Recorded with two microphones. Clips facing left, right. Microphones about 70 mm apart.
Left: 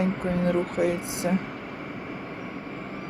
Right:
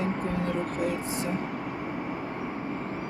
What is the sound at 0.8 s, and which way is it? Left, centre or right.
Speech, left.